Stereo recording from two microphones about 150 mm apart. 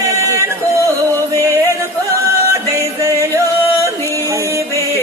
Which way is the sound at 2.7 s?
20° right (ahead or behind).